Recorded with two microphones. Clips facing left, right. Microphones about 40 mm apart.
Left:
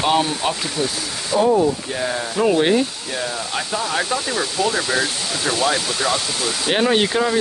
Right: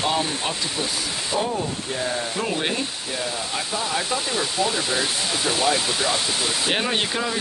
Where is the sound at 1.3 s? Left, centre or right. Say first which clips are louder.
Left 7 dB; centre.